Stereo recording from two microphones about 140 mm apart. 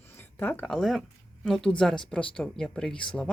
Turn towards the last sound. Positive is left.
turn(degrees=5)  # may be behind; listen again after turning